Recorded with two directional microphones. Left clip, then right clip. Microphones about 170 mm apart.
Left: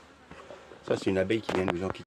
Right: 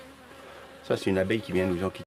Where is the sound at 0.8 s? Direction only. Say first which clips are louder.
Right 1 dB; 5° left (ahead or behind).